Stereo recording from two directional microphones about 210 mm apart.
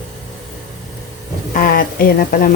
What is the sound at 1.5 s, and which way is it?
Speech, 40° left (ahead or behind).